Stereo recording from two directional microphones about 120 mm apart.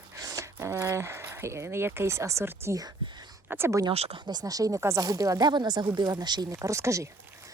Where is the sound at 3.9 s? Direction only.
55° right (ahead or behind).